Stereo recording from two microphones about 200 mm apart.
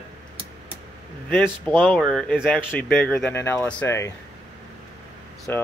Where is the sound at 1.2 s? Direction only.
5° left (ahead or behind).